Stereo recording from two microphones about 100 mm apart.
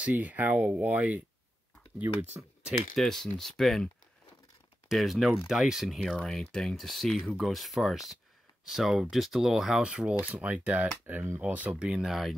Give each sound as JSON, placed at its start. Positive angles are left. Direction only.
{"t": 0.0, "sound": "speech", "side_deg": -15}
{"t": 2.6, "sound": "speech", "side_deg": 0}